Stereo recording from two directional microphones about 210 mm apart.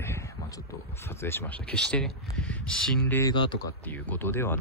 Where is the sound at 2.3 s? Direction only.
5° left (ahead or behind).